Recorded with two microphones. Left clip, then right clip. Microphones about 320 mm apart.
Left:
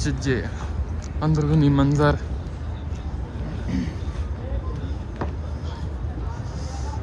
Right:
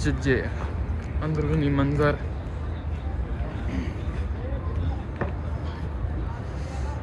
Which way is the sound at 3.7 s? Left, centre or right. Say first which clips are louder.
Left 6 dB; left.